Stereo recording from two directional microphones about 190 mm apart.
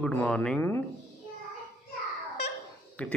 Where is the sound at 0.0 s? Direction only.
5° left (ahead or behind).